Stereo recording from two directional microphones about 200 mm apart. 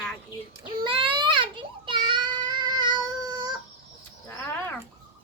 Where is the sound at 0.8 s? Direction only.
25° right (ahead or behind).